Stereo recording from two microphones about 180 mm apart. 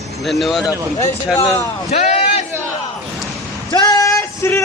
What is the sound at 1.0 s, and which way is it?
Speech, 15° left (ahead or behind).